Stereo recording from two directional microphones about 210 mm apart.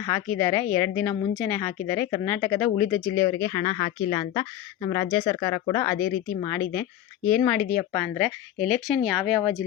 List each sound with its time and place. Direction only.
0.3 s speech: 10° left (ahead or behind)
3.4 s speech: 20° left (ahead or behind); by 9.6 s centre (ahead or behind)